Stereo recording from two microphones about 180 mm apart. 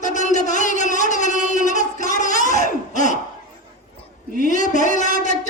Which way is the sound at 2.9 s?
45° left (ahead or behind).